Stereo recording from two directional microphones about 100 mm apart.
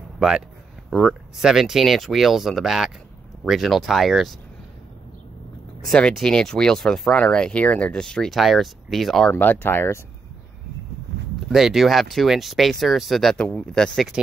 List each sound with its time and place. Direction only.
0.8 s speech: 5° right (ahead or behind)
5.9 s speech: 5° left (ahead or behind)
9.3 s speech: 20° left (ahead or behind)
11.5 s speech: centre (ahead or behind)